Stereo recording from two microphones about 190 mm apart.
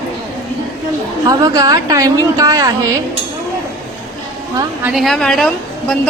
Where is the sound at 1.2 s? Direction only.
20° right (ahead or behind).